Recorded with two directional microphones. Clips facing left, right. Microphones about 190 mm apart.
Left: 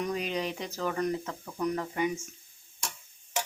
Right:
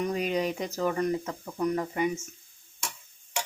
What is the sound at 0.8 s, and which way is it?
Speech, 10° right (ahead or behind).